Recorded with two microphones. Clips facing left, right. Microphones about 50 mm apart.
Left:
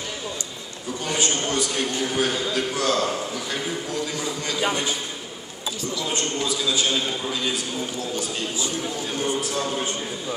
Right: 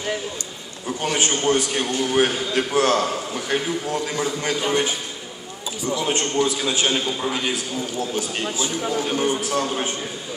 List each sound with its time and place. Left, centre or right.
1.0 s a man's voice: right
1.3 s a man's voice: right
1.7 s a man's voice: right
5.9 s a man's voice: right
8.4 s a man's voice: right